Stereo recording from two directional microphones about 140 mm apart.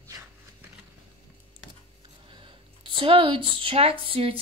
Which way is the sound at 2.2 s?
35° right (ahead or behind).